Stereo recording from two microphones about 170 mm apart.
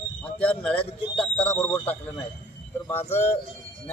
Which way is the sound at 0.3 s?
5° left (ahead or behind).